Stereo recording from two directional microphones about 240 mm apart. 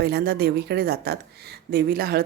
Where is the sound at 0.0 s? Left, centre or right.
Right.